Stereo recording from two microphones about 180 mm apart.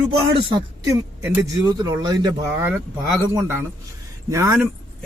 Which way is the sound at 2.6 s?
10° right (ahead or behind).